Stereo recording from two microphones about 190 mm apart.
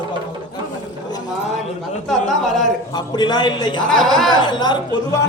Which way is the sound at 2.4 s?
Centre (ahead or behind).